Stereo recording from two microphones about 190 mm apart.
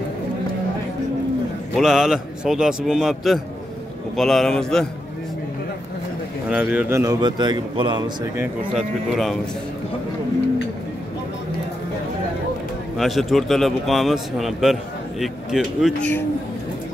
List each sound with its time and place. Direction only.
1.8 s speech: centre (ahead or behind)
6.5 s a man's voice: 10° right (ahead or behind); by 8.0 s 25° right (ahead or behind)
8.4 s speech: centre (ahead or behind)
12.9 s speech: centre (ahead or behind)